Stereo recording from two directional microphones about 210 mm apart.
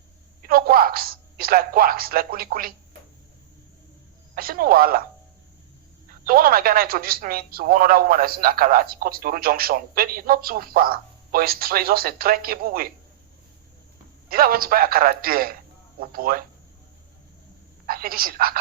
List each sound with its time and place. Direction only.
0.4 s a woman's voice: 45° right (ahead or behind)
4.4 s speech: 45° right (ahead or behind)
6.2 s speech: 45° right (ahead or behind)
14.3 s speech: 45° right (ahead or behind)
17.8 s speech: 45° right (ahead or behind)